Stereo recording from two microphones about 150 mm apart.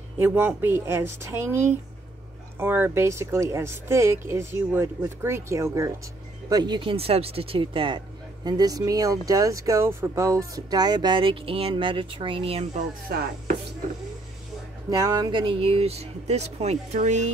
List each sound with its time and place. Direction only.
0.2 s speech: 10° right (ahead or behind)
6.5 s speech: 30° right (ahead or behind)
12.7 s speech: 55° right (ahead or behind)
14.9 s speech: 25° right (ahead or behind); by 17.3 s 50° right (ahead or behind)